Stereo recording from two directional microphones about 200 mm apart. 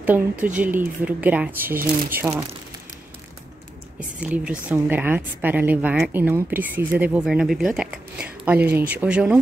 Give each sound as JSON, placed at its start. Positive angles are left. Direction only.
{"t": 0.0, "sound": "speech", "side_deg": -10}
{"t": 1.8, "sound": "speech", "side_deg": -45}
{"t": 4.2, "sound": "speech", "side_deg": -5}